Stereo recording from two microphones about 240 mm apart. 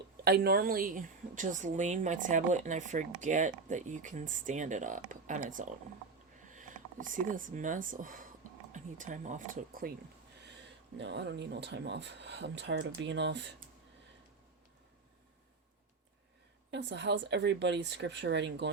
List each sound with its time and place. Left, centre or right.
0.3 s a woman's voice: right
10.9 s speech: right
16.7 s speech: right